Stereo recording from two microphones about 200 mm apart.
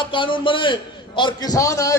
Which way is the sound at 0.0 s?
25° left (ahead or behind).